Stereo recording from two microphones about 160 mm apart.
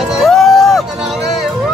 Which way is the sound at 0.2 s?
Centre (ahead or behind).